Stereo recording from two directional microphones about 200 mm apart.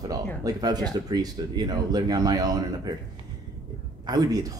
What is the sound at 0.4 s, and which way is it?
Speech, 20° right (ahead or behind).